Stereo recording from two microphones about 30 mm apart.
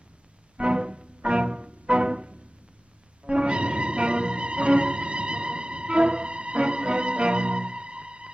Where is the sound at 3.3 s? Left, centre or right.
Right.